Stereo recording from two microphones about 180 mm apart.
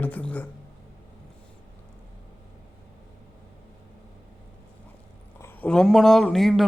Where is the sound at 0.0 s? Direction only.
10° left (ahead or behind).